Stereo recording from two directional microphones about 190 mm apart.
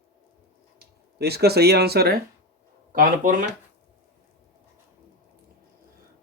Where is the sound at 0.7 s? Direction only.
55° right (ahead or behind).